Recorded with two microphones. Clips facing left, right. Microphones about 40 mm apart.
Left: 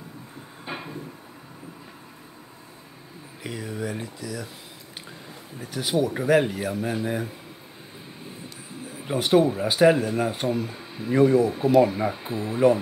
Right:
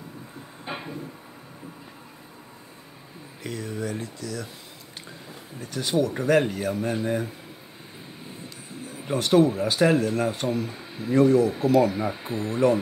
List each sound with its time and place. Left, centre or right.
0.7 s a sound: centre
3.4 s speech: centre
5.6 s speech: centre
8.8 s a sound: centre
9.2 s speech: centre
11.1 s speech: centre
11.9 s speech: centre